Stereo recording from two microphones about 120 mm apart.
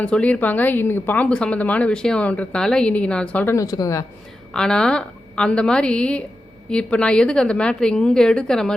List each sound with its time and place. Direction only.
0.0 s speech: 10° left (ahead or behind)
3.5 s speech: 30° left (ahead or behind)
4.5 s speech: 5° left (ahead or behind)